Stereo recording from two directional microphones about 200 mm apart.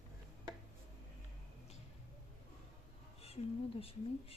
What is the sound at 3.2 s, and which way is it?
Speech, 30° left (ahead or behind).